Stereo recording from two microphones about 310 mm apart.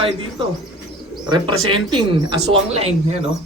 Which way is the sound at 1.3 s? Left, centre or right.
Centre.